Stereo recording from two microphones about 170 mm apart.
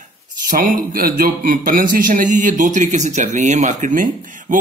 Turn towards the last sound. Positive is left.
turn(degrees=-50)  # may be behind; listen again after turning